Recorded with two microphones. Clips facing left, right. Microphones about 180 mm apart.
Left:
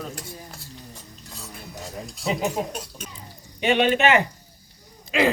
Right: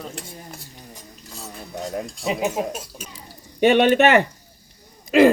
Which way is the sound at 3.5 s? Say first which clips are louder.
Right 5 dB; 50° right (ahead or behind).